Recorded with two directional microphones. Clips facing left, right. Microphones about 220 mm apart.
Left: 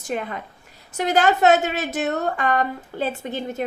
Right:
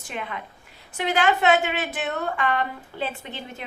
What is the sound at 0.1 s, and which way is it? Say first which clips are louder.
A woman's voice: left 6 dB; 40° left (ahead or behind).